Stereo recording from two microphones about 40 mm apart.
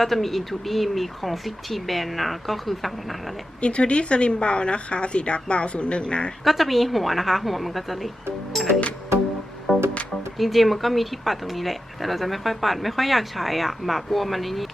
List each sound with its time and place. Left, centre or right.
0.0 s speech: centre
3.6 s a woman's voice: left
6.4 s speech: centre
8.5 s music: centre
10.3 s speech: centre